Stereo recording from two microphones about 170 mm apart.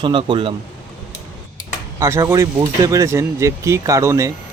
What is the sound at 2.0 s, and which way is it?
Speech, 15° right (ahead or behind).